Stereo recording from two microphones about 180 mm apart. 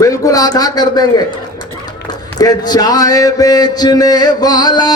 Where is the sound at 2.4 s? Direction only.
20° left (ahead or behind).